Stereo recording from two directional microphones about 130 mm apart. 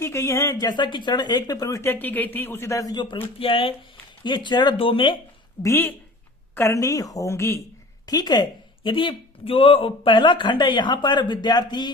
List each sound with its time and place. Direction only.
0.0 s speech: 20° left (ahead or behind)
0.7 s speech: 35° left (ahead or behind)
5.6 s a woman's voice: 15° left (ahead or behind)
8.0 s speech: 30° left (ahead or behind)